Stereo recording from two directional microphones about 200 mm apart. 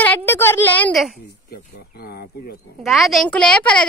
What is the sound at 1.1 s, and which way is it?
Speech, 50° left (ahead or behind).